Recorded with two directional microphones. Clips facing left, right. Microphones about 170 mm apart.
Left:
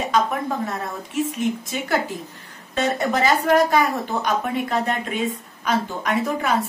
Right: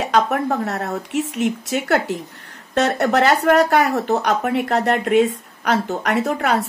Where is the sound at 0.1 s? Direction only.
70° right (ahead or behind).